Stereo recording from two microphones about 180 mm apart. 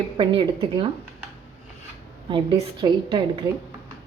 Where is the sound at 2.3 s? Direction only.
30° right (ahead or behind).